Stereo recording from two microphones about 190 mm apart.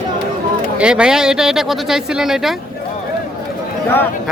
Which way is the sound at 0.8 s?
5° right (ahead or behind).